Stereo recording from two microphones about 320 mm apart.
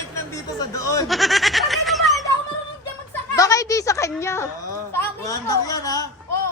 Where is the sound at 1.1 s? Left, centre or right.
Centre.